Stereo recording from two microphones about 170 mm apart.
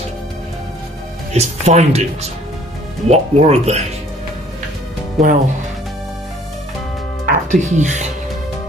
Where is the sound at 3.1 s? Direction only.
40° right (ahead or behind).